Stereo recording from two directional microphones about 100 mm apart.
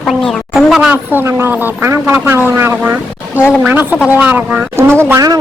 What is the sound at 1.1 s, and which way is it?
Speech, 20° right (ahead or behind).